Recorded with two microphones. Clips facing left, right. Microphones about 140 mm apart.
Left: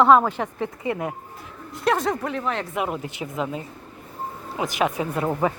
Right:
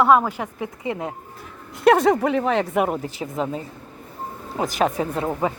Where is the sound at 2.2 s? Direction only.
80° right; by 3.0 s 50° right (ahead or behind).